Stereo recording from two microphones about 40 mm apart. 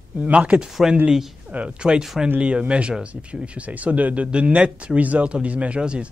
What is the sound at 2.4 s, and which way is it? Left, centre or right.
Speech, right.